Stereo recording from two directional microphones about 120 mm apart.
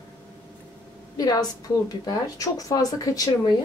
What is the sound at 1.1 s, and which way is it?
A woman's voice, 30° left (ahead or behind).